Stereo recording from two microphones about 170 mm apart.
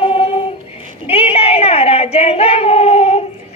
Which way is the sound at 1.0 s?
35° left (ahead or behind).